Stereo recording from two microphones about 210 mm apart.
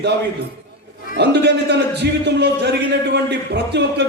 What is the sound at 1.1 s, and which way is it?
A man's voice, 55° right (ahead or behind).